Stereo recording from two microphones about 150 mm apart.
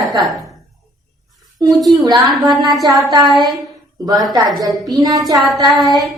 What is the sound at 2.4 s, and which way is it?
Speech, 30° right (ahead or behind).